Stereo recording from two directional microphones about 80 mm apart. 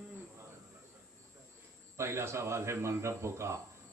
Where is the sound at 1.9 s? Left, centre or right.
Right.